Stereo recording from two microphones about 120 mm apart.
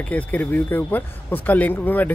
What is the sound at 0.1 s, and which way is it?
A man's voice, 15° left (ahead or behind).